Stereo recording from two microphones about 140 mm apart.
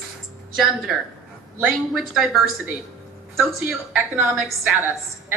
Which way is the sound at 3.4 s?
5° right (ahead or behind).